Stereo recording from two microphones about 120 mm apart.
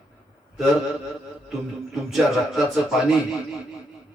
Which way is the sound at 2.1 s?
Centre (ahead or behind).